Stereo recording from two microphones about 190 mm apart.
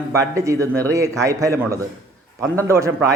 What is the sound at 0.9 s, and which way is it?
Speech, 15° right (ahead or behind).